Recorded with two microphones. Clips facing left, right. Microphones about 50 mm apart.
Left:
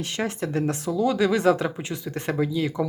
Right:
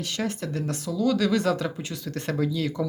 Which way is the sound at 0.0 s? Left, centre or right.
Left.